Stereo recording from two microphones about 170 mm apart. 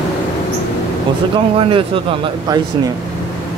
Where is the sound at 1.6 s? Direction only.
30° right (ahead or behind).